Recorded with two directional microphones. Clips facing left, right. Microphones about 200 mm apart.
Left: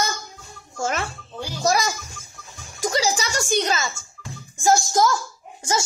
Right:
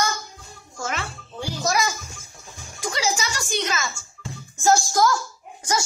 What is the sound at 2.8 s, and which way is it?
Speech, 40° left (ahead or behind).